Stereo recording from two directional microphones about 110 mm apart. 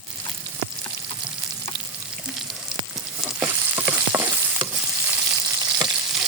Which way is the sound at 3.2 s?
20° right (ahead or behind).